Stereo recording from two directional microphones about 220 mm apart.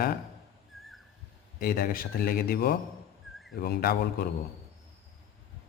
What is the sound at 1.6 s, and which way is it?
Speech, 40° left (ahead or behind).